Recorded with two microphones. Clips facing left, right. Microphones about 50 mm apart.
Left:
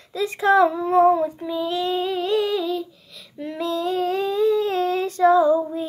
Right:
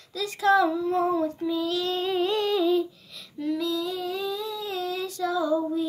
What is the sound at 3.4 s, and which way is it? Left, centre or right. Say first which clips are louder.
Female singing: left 2 dB; left.